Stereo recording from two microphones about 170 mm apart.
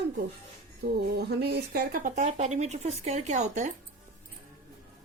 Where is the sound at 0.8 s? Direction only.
70° right (ahead or behind); by 3.7 s 45° right (ahead or behind).